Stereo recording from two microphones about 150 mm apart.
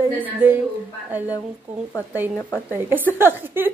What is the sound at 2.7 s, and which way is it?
A woman's voice, 10° right (ahead or behind).